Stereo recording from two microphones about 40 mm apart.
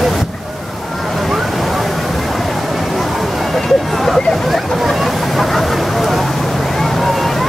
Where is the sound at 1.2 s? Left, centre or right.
Centre.